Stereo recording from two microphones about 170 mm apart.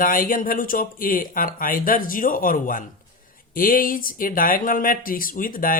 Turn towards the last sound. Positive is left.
turn(degrees=55)  # may be behind; listen again after turning